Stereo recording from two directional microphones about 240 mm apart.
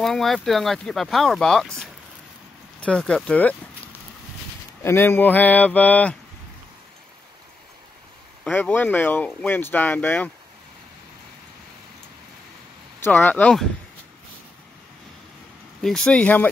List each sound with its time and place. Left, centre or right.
0.0 s speech: centre
4.8 s speech: centre
8.5 s speech: centre
13.0 s speech: centre
15.8 s speech: centre